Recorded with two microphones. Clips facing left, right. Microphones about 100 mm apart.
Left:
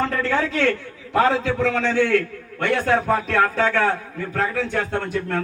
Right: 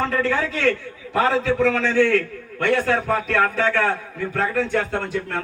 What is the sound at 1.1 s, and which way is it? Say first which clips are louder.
A man's voice: left 1 dB; 20° left (ahead or behind).